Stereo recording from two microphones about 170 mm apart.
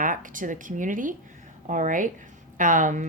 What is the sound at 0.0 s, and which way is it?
A woman's voice, 50° right (ahead or behind).